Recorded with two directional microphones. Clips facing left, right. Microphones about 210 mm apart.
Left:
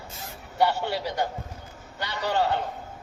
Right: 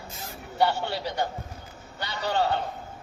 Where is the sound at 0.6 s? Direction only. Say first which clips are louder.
Left 1 dB; 10° left (ahead or behind).